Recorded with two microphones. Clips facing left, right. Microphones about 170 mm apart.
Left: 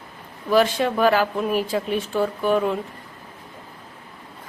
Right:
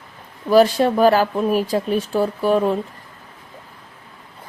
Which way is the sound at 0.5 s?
35° right (ahead or behind).